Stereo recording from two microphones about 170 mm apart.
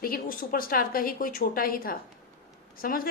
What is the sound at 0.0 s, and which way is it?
A woman's voice, 60° left (ahead or behind).